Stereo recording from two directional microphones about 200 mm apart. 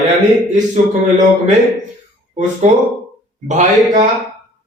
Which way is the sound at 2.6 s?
35° right (ahead or behind).